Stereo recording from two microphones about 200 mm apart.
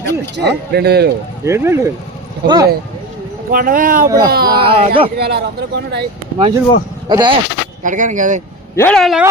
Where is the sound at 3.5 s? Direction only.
45° right (ahead or behind).